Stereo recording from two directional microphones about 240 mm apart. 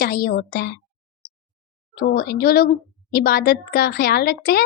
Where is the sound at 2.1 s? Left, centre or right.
Left.